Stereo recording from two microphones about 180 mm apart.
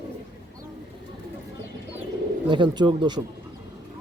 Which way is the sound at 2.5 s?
25° right (ahead or behind).